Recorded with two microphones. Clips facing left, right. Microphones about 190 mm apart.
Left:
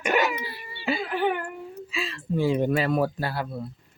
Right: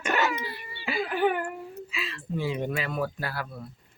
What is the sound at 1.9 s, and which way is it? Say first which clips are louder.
Speech: left 6 dB; 30° left (ahead or behind).